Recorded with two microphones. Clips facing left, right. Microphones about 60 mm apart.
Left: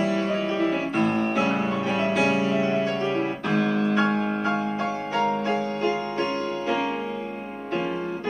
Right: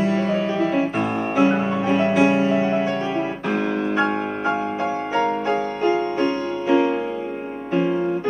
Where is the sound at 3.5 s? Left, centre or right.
Centre.